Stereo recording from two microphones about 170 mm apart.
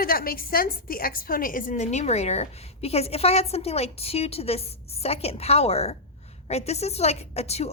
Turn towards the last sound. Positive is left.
turn(degrees=40)  # may be behind; listen again after turning